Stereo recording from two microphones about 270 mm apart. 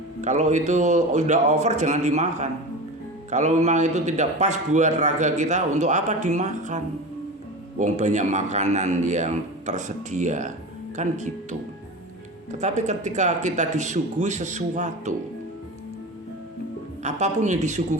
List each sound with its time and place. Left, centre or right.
0.2 s a man's voice: right
12.5 s a man's voice: right
17.0 s a man's voice: right